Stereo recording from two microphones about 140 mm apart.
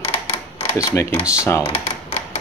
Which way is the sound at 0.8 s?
20° left (ahead or behind).